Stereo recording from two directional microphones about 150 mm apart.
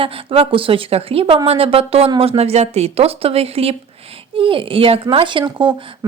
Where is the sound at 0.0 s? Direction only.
40° right (ahead or behind).